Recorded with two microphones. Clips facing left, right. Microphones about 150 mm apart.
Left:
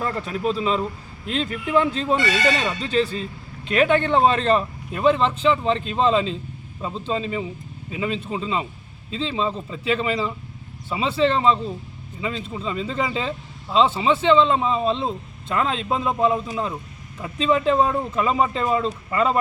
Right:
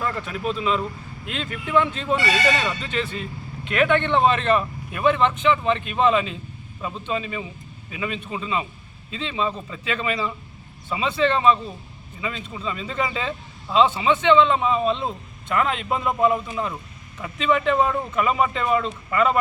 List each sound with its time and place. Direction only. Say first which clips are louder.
0.0 s speech: left 2 dB; 35° left (ahead or behind)